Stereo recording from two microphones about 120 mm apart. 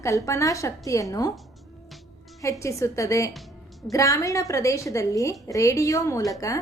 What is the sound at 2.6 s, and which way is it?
A woman's voice, 25° left (ahead or behind).